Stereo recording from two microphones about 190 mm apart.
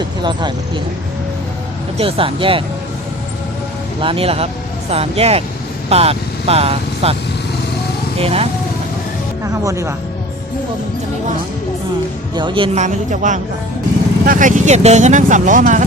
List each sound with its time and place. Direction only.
0.2 s speech: 25° right (ahead or behind)
2.0 s speech: 30° right (ahead or behind)
4.0 s speech: 30° right (ahead or behind)
8.2 s speech: 30° right (ahead or behind)
9.4 s speech: 15° right (ahead or behind)
12.3 s speech: 25° right (ahead or behind); by 15.9 s 40° right (ahead or behind)